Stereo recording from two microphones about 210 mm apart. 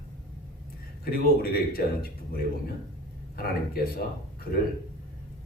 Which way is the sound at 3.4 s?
45° left (ahead or behind).